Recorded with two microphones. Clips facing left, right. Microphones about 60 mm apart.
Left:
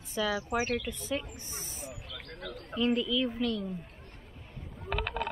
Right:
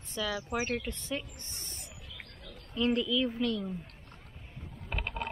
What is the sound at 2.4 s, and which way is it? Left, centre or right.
Bird, left.